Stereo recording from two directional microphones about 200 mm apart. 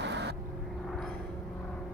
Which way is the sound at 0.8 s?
Centre (ahead or behind).